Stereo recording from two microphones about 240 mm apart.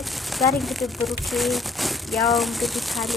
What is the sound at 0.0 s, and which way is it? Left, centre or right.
A woman's voice, centre.